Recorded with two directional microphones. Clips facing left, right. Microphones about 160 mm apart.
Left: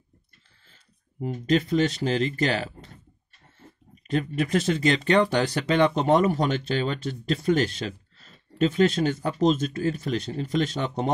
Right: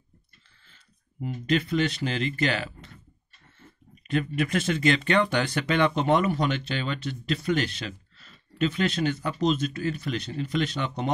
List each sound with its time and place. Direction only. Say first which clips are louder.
1.2 s speech: left 3 dB; 40° left (ahead or behind)